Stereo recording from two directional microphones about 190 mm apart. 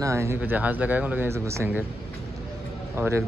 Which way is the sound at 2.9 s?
10° right (ahead or behind).